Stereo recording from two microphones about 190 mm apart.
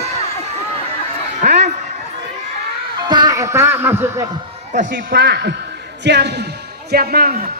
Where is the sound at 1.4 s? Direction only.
35° right (ahead or behind).